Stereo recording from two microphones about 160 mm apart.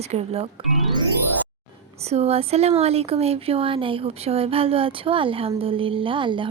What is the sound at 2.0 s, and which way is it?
A woman's voice, 40° right (ahead or behind).